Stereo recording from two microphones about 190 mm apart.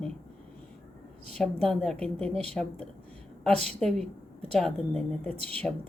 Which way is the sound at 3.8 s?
5° left (ahead or behind).